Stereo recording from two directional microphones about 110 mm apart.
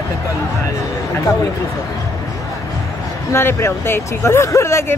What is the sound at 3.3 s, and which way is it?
Speech, 25° left (ahead or behind).